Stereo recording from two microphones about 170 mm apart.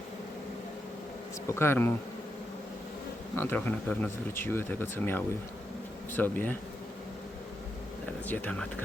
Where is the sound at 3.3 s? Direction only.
10° left (ahead or behind).